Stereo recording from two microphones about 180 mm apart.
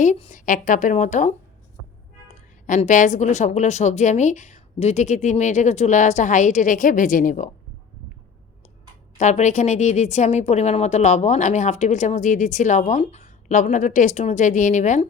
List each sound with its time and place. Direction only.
0.0 s a woman's voice: 40° left (ahead or behind)
2.6 s speech: 45° left (ahead or behind)
9.1 s speech: 40° left (ahead or behind)